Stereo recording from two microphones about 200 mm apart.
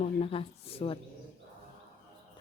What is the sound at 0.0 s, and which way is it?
Speech, 30° left (ahead or behind).